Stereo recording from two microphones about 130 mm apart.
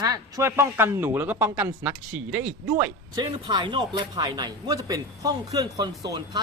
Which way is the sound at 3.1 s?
35° right (ahead or behind).